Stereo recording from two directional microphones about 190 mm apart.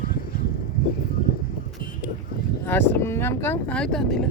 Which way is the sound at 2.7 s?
10° left (ahead or behind).